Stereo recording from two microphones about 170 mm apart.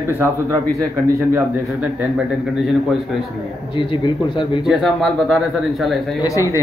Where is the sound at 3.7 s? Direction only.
30° left (ahead or behind).